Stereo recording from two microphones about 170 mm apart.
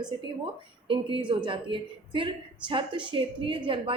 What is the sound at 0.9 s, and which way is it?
A woman's voice, 30° right (ahead or behind).